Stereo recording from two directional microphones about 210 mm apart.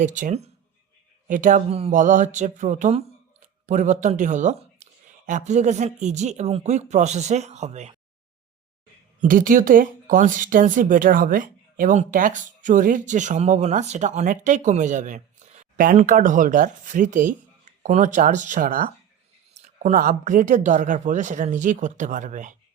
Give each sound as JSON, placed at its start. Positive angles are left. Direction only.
{"t": 0.0, "sound": "speech", "side_deg": -35}
{"t": 9.2, "sound": "speech", "side_deg": -40}